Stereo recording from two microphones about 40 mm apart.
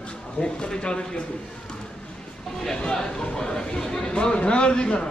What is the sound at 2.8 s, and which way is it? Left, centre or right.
Chatter, centre.